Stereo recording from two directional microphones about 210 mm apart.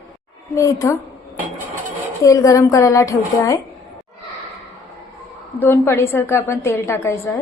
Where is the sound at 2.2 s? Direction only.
15° left (ahead or behind).